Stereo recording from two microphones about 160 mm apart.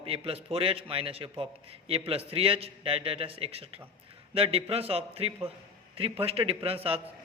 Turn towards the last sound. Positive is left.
turn(degrees=-35)  # may be behind; listen again after turning